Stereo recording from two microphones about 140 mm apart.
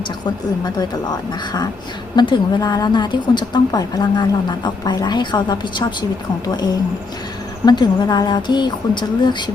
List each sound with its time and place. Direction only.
2.1 s a woman's voice: 35° left (ahead or behind)